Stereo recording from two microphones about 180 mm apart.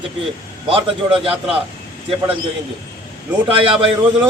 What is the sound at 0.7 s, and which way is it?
Speech, 30° right (ahead or behind).